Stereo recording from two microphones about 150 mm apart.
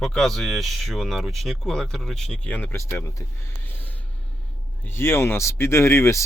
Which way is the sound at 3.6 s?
10° left (ahead or behind).